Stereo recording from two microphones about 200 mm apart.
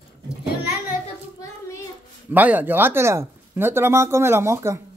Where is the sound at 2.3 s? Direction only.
10° right (ahead or behind).